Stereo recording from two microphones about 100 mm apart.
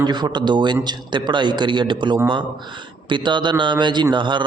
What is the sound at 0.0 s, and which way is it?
A man's voice, 45° right (ahead or behind).